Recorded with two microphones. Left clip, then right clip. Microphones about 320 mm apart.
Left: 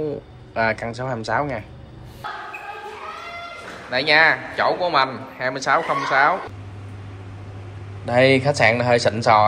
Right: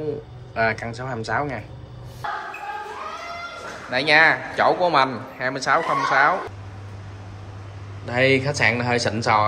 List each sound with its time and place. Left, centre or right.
0.6 s speech: centre
3.9 s a man's voice: centre
8.0 s speech: centre